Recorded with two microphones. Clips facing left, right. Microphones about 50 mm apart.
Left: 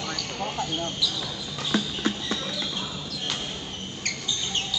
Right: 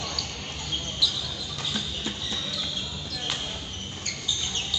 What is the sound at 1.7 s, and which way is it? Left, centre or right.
Clip-clop, left.